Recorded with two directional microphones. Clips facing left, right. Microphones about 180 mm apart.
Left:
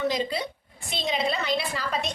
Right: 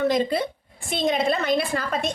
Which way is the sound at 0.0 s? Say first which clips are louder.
Right 5 dB; 55° right (ahead or behind).